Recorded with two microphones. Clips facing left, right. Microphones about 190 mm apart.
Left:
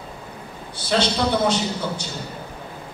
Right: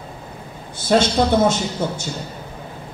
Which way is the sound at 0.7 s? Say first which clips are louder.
Right 5 dB; 45° right (ahead or behind).